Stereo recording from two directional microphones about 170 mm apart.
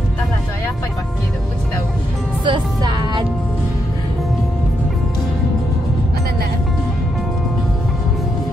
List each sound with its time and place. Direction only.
2.4 s music: 25° right (ahead or behind)